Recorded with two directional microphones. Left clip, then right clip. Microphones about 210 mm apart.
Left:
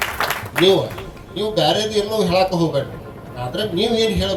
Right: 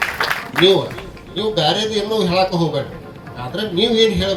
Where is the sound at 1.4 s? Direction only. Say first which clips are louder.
Even; 45° left (ahead or behind).